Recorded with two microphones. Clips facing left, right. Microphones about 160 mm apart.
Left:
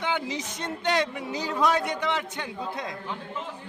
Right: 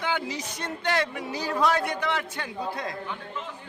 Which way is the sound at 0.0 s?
20° left (ahead or behind).